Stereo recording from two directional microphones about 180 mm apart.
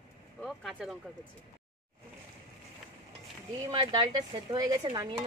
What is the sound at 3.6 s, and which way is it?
A woman's voice, 25° right (ahead or behind).